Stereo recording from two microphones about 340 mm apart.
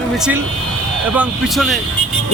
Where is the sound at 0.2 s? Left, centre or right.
Centre.